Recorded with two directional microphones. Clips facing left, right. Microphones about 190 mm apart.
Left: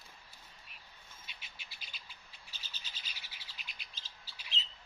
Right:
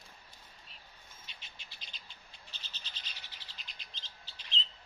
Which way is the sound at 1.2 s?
10° left (ahead or behind).